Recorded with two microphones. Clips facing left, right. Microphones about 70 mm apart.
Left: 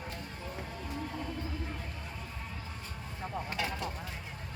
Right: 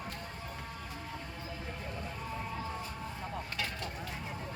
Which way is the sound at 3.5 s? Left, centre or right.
Centre.